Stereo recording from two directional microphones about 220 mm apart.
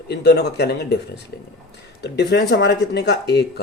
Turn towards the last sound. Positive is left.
turn(degrees=50)  # may be behind; listen again after turning